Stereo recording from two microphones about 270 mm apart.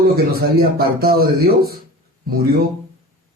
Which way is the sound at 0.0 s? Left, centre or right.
Right.